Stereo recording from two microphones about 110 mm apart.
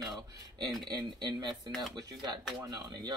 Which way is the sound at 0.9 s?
40° right (ahead or behind).